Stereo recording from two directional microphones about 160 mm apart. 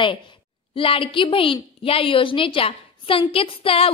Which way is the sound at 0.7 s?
35° left (ahead or behind).